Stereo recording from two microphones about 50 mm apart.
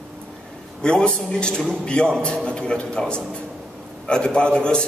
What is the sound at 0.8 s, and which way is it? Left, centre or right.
A man's voice, centre.